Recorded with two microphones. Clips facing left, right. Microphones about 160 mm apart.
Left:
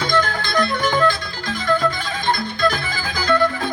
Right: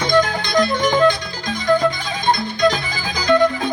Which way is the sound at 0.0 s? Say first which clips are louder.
Right 4 dB; 15° right (ahead or behind).